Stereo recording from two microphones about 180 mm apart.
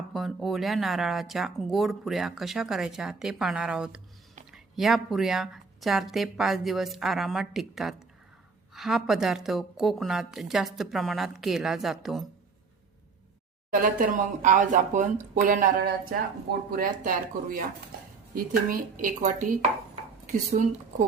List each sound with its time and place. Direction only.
0.1 s speech: centre (ahead or behind)
13.7 s speech: 50° right (ahead or behind)
20.6 s speech: 50° right (ahead or behind)